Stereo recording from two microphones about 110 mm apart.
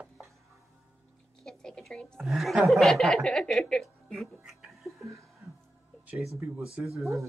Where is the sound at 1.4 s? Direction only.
5° left (ahead or behind).